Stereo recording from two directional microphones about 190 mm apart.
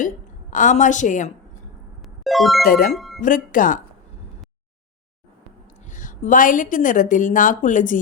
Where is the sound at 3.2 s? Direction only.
45° left (ahead or behind).